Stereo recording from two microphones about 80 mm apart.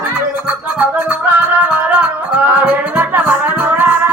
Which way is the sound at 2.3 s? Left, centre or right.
Right.